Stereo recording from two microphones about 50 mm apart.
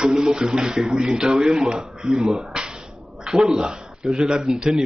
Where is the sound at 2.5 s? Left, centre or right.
Centre.